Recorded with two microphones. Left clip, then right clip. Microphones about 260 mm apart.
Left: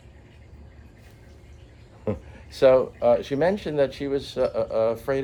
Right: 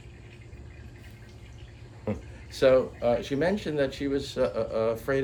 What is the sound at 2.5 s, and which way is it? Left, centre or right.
Speech, left.